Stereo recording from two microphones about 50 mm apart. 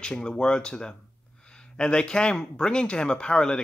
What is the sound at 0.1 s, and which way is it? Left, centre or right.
Speech, centre.